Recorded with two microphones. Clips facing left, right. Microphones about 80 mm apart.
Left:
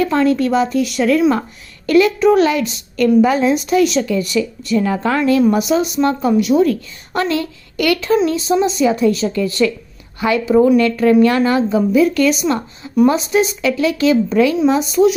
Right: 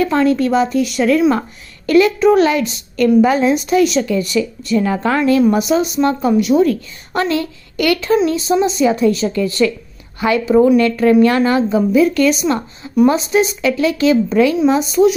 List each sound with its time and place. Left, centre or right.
0.0 s a woman's voice: right